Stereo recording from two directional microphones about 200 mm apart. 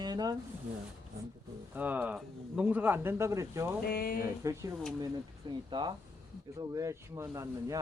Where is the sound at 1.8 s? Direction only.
10° right (ahead or behind).